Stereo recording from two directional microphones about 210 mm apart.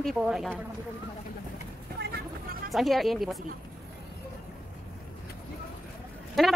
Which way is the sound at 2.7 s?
Centre (ahead or behind).